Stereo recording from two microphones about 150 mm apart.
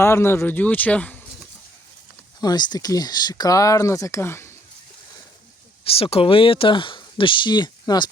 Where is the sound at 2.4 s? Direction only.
25° left (ahead or behind).